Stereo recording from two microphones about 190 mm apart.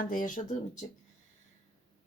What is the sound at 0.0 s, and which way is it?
Speech, 45° left (ahead or behind).